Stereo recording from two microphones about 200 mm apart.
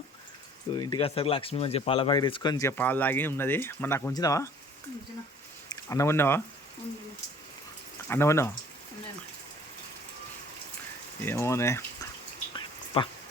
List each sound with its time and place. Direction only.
0.7 s speech: 20° left (ahead or behind)
5.6 s speech: 15° left (ahead or behind)
8.0 s speech: 10° left (ahead or behind)
11.3 s speech: 15° left (ahead or behind)
12.5 s a sound: 25° left (ahead or behind)